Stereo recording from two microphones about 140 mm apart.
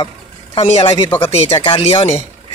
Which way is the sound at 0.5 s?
50° left (ahead or behind).